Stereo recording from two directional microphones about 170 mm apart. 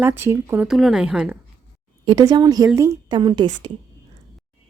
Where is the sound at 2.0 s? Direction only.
25° right (ahead or behind).